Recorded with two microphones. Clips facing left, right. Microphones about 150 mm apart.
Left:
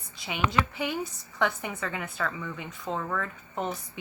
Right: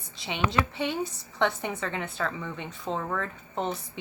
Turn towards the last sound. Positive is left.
turn(degrees=-25)  # may be behind; listen again after turning